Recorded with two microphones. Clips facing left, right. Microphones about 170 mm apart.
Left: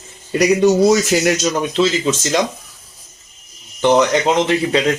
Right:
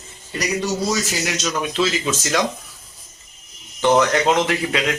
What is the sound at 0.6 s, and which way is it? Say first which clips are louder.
Speech: left 12 dB; 55° left (ahead or behind).